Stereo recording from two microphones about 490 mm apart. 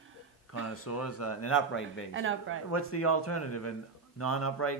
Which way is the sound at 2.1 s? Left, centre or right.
Right.